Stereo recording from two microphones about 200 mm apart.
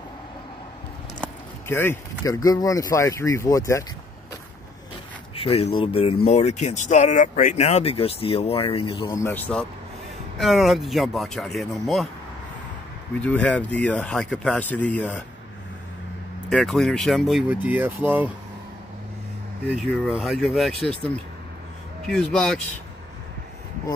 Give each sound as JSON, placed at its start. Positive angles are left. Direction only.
{"t": 1.2, "sound": "speech", "side_deg": 10}
{"t": 5.3, "sound": "speech", "side_deg": 30}
{"t": 13.2, "sound": "speech", "side_deg": 5}
{"t": 16.4, "sound": "speech", "side_deg": 0}
{"t": 19.7, "sound": "speech", "side_deg": 0}
{"t": 22.0, "sound": "speech", "side_deg": 5}